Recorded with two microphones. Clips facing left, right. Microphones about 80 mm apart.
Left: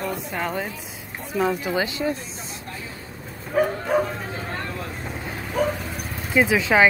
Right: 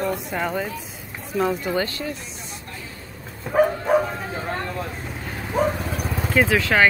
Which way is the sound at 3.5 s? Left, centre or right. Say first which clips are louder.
Right 3 dB; right.